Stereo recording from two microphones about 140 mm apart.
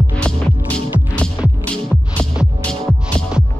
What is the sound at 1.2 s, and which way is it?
Music, 10° left (ahead or behind).